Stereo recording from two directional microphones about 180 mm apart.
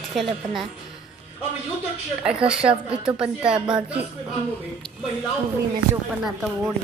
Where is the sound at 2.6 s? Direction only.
5° right (ahead or behind).